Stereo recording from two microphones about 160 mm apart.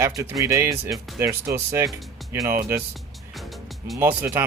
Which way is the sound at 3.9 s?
15° right (ahead or behind).